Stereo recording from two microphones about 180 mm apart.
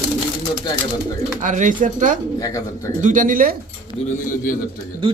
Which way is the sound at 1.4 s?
45° right (ahead or behind).